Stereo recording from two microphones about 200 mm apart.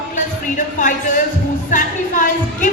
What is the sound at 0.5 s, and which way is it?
Speech, 40° left (ahead or behind).